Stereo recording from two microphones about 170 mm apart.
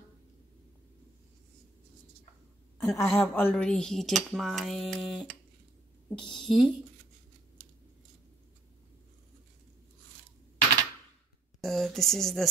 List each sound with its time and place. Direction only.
2.8 s a woman's voice: 15° left (ahead or behind); by 5.3 s centre (ahead or behind)
6.3 s speech: centre (ahead or behind)
11.6 s speech: centre (ahead or behind)